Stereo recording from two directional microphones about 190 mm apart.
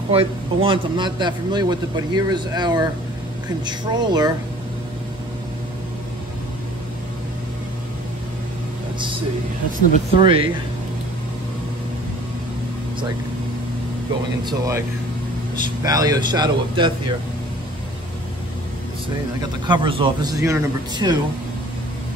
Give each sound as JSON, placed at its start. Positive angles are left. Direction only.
{"t": 0.1, "sound": "a man's voice", "side_deg": -30}
{"t": 10.1, "sound": "a man's voice", "side_deg": -25}
{"t": 14.4, "sound": "a man's voice", "side_deg": -20}
{"t": 19.6, "sound": "a man's voice", "side_deg": -25}